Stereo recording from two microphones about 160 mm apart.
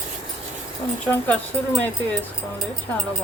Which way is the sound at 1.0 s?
10° left (ahead or behind).